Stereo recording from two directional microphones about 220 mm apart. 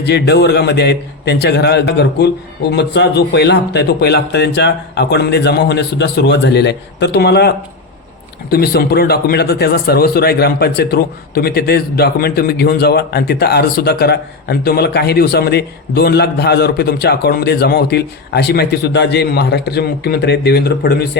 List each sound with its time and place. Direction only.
0.0 s speech: 50° left (ahead or behind)